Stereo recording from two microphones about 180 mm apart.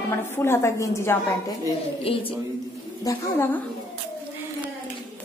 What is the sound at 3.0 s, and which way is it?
Speech, 15° left (ahead or behind).